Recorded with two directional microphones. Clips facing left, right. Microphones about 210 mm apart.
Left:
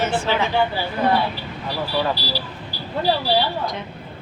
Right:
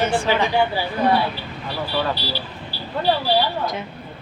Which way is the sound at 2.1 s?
40° left (ahead or behind).